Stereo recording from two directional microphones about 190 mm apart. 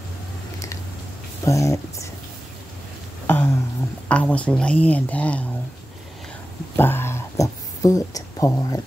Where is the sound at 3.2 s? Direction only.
10° left (ahead or behind).